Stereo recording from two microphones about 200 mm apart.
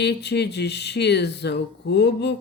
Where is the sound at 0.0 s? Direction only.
55° left (ahead or behind).